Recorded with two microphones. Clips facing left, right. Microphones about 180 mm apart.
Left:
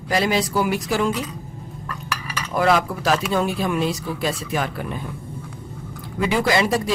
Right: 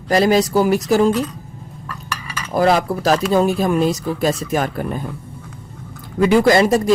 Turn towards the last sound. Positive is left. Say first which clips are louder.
# right 7 dB
turn(degrees=-45)  # may be behind; listen again after turning